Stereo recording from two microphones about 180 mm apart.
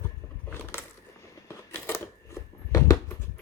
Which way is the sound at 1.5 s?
15° left (ahead or behind).